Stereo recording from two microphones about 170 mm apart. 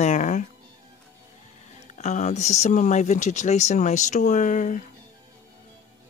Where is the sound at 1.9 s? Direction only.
40° left (ahead or behind).